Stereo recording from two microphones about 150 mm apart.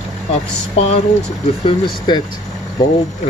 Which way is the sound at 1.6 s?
30° left (ahead or behind).